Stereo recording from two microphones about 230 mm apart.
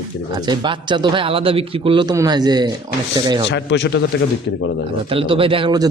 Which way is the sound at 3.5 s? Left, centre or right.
Left.